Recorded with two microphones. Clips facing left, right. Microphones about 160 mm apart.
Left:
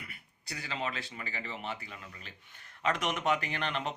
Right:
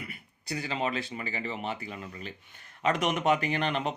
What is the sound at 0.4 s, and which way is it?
Speech, 20° right (ahead or behind).